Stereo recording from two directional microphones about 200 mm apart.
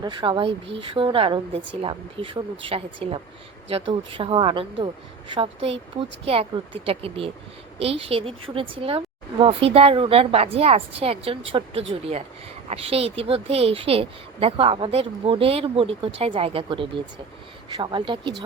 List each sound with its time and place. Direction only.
0.0 s speech: 20° right (ahead or behind)
6.2 s speech: 30° right (ahead or behind)